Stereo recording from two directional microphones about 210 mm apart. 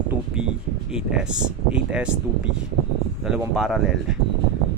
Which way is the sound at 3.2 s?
Centre (ahead or behind).